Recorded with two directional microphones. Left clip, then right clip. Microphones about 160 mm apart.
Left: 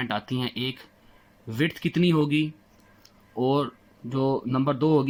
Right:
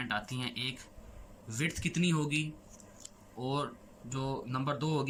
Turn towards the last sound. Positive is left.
turn(degrees=50)  # may be behind; listen again after turning